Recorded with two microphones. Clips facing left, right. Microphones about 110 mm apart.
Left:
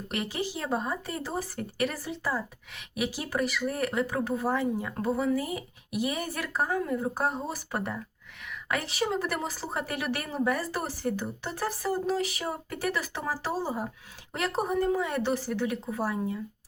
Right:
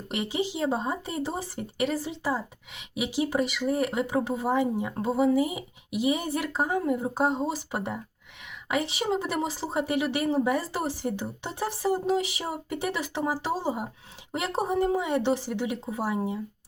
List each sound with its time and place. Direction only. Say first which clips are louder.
0.1 s speech: right 3 dB; 20° right (ahead or behind)